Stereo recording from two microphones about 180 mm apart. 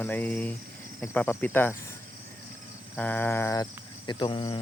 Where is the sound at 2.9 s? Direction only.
10° left (ahead or behind); by 4.5 s 25° left (ahead or behind).